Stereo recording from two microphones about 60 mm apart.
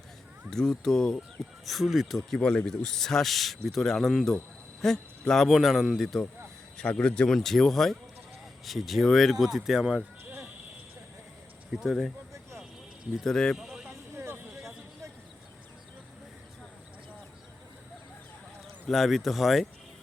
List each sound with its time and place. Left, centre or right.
0.5 s speech: centre
1.6 s speech: centre
2.4 s speech: centre
5.5 s speech: centre
6.7 s speech: centre
11.9 s speech: centre
13.2 s speech: centre
13.6 s a sound: centre
14.3 s a sound: right
18.9 s speech: centre